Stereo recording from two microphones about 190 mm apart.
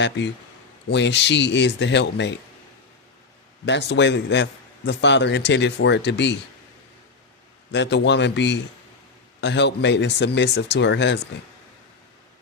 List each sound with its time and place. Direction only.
0.0 s speech: 70° left (ahead or behind)
3.7 s speech: 65° left (ahead or behind)
7.7 s speech: 65° left (ahead or behind)